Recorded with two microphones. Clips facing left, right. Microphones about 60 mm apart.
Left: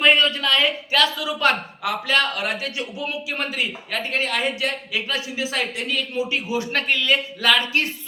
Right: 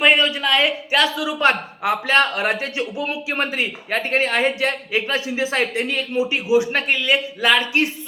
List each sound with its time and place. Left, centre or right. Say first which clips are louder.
0.0 s speech: right 1 dB; centre